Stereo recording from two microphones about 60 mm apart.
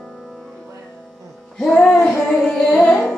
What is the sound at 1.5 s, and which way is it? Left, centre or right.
Music, centre.